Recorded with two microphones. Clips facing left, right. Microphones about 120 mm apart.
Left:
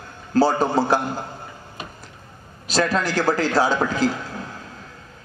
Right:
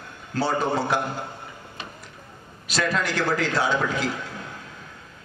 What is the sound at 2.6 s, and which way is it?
A man's voice, 35° left (ahead or behind).